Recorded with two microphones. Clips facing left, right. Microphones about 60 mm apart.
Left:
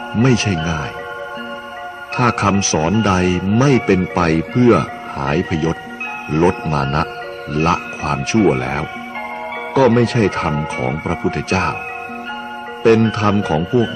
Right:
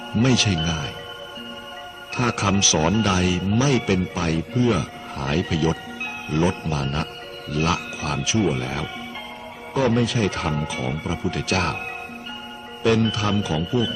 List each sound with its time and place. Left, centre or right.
0.1 s speech: left
2.1 s speech: left
5.3 s speech: left
6.3 s speech: left
7.5 s speech: left
9.8 s speech: left
12.8 s speech: left